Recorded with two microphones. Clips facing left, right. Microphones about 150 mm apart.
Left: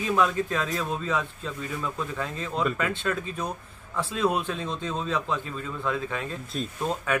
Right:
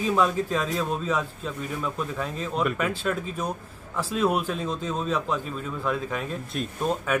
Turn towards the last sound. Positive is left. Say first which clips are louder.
# right 2 dB
turn(degrees=-5)  # may be behind; listen again after turning